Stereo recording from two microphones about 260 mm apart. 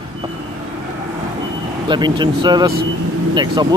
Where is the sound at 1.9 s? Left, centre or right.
Centre.